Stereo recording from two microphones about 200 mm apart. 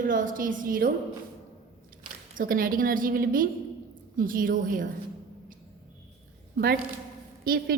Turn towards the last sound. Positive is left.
turn(degrees=-45)  # may be behind; listen again after turning